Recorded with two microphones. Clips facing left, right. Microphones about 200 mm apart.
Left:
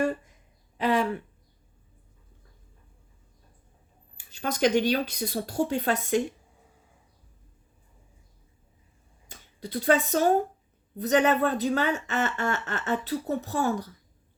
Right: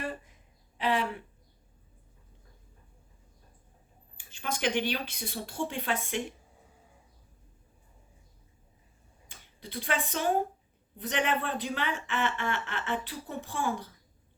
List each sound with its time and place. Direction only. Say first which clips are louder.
0.8 s a sound: left 5 dB; 45° left (ahead or behind)
4.2 s speech: left 7 dB; 40° left (ahead or behind)
9.3 s speech: left 7 dB; 40° left (ahead or behind)